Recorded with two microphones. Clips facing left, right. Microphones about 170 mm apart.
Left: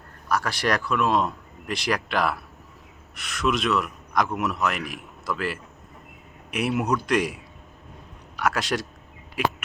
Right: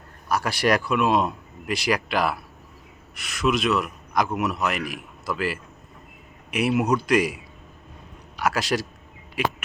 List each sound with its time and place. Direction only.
0.3 s a man's voice: 10° right (ahead or behind)
8.4 s speech: 5° right (ahead or behind)